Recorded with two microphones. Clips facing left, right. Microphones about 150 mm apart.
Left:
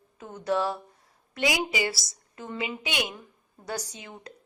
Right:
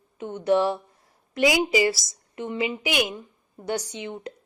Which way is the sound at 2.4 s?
25° right (ahead or behind).